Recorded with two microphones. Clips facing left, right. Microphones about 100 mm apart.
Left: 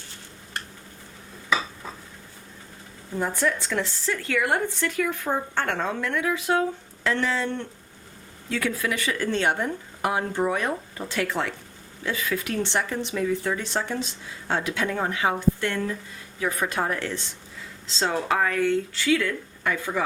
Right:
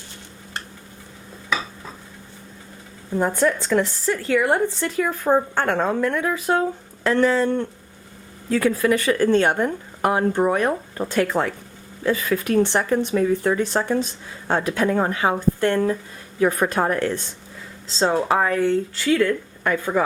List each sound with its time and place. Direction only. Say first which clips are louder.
3.2 s speech: right 5 dB; 45° right (ahead or behind)
17.8 s speech: right 5 dB; 35° right (ahead or behind)
19.0 s speech: right 6 dB; 45° right (ahead or behind)